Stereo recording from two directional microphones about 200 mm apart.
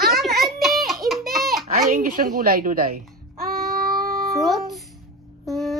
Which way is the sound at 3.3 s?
50° right (ahead or behind).